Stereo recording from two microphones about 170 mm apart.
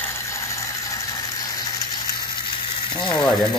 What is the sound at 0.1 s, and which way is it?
Ratchet, 15° left (ahead or behind).